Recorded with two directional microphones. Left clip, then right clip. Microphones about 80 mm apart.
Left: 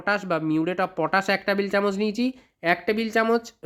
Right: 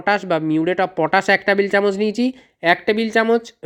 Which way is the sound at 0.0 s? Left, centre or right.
Right.